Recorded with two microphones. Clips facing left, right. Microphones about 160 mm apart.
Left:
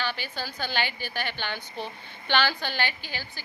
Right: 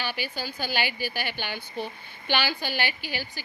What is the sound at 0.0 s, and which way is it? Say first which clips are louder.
A woman's voice: even; 10° right (ahead or behind).